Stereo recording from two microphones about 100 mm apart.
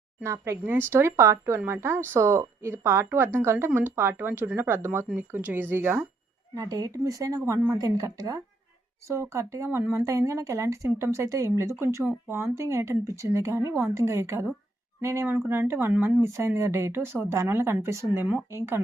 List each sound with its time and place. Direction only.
0.2 s speech: 30° right (ahead or behind)
6.5 s speech: 35° right (ahead or behind)
9.6 s speech: 20° right (ahead or behind)
9.9 s speech: 30° right (ahead or behind)